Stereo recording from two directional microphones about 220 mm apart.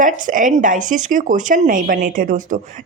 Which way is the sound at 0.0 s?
35° right (ahead or behind).